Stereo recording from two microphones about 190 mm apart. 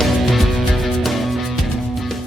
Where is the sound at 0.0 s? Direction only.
Centre (ahead or behind).